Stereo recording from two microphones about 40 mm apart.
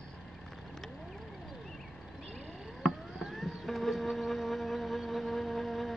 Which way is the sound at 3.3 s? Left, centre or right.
Centre.